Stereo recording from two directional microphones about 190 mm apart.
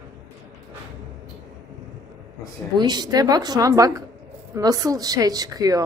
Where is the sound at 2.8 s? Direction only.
20° right (ahead or behind).